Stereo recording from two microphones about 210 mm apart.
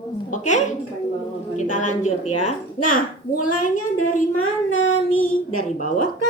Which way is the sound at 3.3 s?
90° left.